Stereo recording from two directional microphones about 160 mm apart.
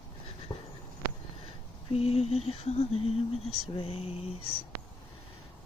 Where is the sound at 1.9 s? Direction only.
40° left (ahead or behind).